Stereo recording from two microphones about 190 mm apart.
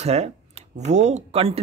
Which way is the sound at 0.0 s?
35° right (ahead or behind).